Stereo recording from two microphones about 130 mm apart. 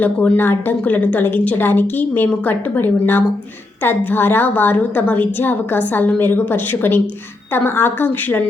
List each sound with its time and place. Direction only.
0.0 s a woman's voice: 15° left (ahead or behind)